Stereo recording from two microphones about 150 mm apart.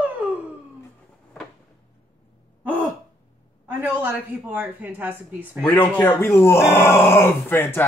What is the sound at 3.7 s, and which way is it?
Speech, 15° right (ahead or behind).